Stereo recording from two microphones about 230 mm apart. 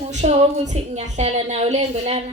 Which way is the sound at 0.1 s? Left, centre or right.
Right.